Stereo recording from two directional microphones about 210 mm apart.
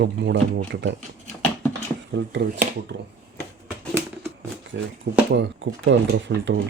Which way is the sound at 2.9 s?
55° right (ahead or behind).